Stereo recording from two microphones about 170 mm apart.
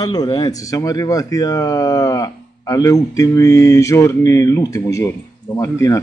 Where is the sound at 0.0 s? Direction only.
25° left (ahead or behind).